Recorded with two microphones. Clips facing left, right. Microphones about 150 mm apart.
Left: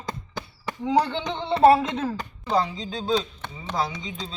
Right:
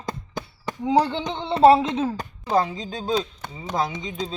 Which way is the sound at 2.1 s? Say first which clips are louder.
Right 2 dB; 45° right (ahead or behind).